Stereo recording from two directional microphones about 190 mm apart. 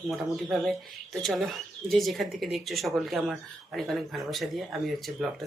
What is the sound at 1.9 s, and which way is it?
Speech, centre (ahead or behind).